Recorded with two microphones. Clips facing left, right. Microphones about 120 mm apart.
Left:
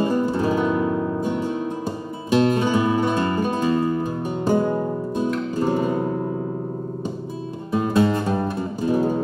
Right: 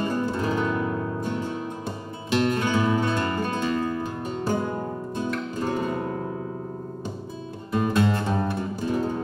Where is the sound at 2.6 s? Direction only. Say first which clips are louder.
Left 3 dB; 15° left (ahead or behind).